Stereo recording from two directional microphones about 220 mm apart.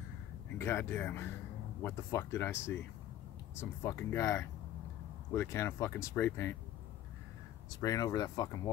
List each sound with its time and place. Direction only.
0.6 s speech: 10° left (ahead or behind)
3.5 s speech: 10° left (ahead or behind)
7.7 s speech: 15° left (ahead or behind)